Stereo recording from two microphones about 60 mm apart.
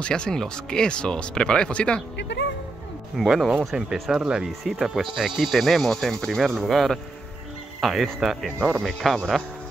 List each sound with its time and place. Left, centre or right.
0.0 s speech: centre
3.2 s speech: centre
3.5 s speech: centre
8.5 s speech: centre
8.8 s speech: centre